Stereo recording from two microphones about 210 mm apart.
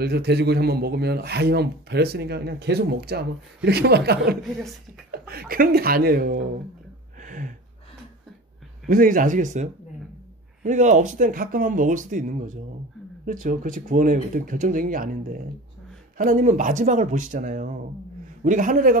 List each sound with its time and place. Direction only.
0.0 s speech: 50° right (ahead or behind)
7.2 s a sound: 40° right (ahead or behind)
8.8 s speech: 40° right (ahead or behind)